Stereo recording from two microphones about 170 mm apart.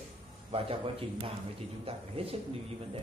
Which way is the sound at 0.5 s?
35° right (ahead or behind).